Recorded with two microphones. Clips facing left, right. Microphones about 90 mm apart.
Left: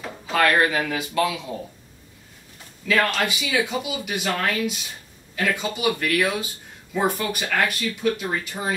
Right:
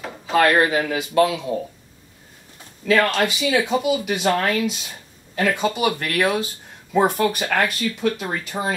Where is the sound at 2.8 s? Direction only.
30° right (ahead or behind).